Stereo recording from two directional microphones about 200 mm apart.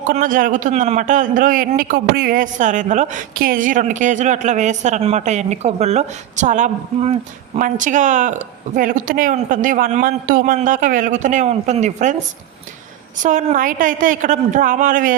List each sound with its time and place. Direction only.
0.1 s a man's voice: 40° right (ahead or behind)
13.1 s a man's voice: 40° right (ahead or behind)